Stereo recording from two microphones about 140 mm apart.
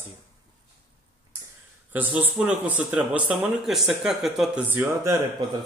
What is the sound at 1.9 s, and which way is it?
Speech, 10° right (ahead or behind).